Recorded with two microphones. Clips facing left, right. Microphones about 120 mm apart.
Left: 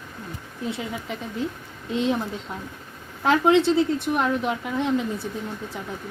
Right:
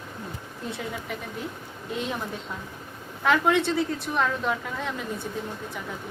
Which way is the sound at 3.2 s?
30° left (ahead or behind).